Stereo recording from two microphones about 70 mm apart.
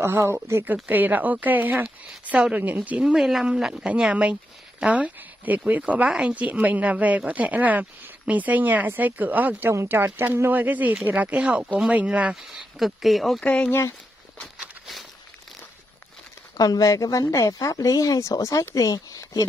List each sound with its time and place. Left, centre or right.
0.0 s speech: right
0.8 s speech: right
3.0 s speech: centre; by 9.7 s right
9.7 s speech: right; by 12.6 s centre
12.7 s speech: centre
13.4 s speech: centre
16.5 s speech: left